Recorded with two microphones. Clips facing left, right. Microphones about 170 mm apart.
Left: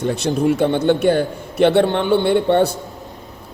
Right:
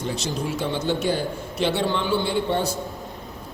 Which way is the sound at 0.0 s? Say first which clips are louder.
Left 9 dB; 60° left (ahead or behind).